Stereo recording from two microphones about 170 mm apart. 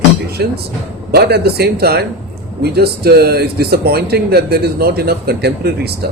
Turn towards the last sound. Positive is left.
turn(degrees=-65)  # may be behind; listen again after turning